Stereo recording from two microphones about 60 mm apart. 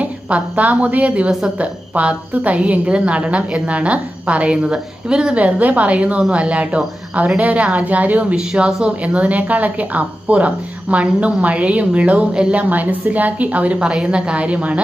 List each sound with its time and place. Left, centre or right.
0.0 s a woman's voice: right
5.4 s speech: right